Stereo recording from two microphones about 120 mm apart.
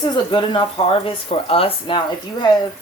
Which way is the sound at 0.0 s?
40° left (ahead or behind).